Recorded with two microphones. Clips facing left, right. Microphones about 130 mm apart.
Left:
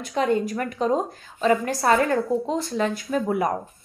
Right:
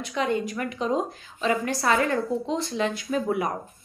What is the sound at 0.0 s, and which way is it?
A woman's voice, 45° left (ahead or behind).